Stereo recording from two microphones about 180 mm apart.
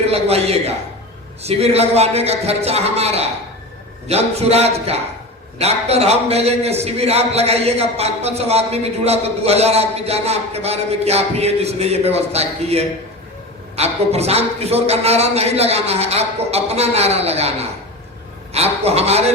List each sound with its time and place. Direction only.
0.1 s a man's voice: 35° right (ahead or behind)